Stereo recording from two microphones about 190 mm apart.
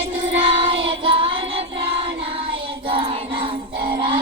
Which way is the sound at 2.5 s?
30° right (ahead or behind).